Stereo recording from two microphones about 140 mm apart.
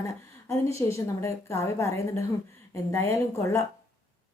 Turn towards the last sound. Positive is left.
turn(degrees=20)  # may be behind; listen again after turning